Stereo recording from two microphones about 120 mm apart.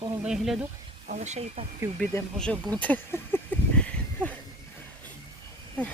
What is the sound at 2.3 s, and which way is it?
Speech, 10° left (ahead or behind).